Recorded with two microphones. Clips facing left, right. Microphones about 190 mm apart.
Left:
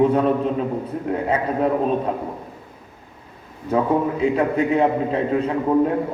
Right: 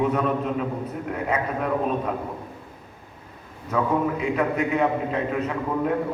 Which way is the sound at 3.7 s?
30° left (ahead or behind).